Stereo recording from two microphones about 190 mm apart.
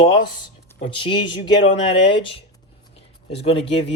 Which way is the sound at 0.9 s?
25° left (ahead or behind).